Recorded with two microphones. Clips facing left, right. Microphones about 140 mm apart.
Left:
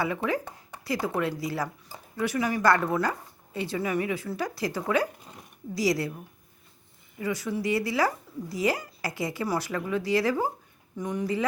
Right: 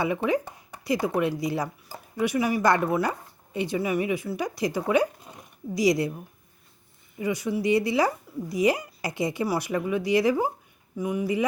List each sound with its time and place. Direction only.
0.0 s speech: 20° right (ahead or behind)
7.2 s speech: 15° right (ahead or behind)